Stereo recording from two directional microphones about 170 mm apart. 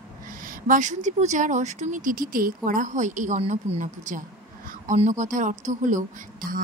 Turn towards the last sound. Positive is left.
turn(degrees=-55)  # may be behind; listen again after turning